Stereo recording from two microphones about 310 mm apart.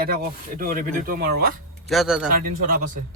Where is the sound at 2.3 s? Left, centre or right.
Right.